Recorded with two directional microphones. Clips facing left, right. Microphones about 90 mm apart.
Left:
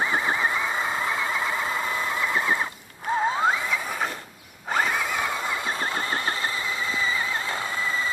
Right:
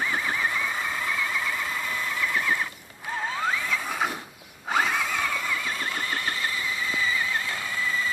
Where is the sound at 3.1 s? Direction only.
30° left (ahead or behind).